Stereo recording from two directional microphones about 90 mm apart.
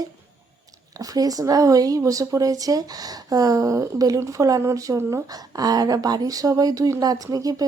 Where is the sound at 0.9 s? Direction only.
40° right (ahead or behind).